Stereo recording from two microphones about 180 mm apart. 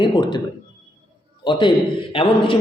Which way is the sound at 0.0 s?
25° left (ahead or behind).